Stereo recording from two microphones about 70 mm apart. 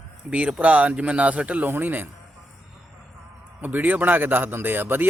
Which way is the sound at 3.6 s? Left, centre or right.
Right.